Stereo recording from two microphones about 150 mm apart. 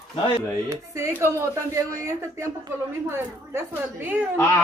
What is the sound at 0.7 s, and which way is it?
A woman's voice, 20° right (ahead or behind).